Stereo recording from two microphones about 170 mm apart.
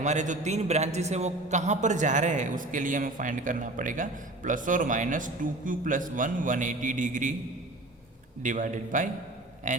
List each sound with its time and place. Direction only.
0.0 s a man's voice: 45° right (ahead or behind)
8.4 s a man's voice: 50° right (ahead or behind)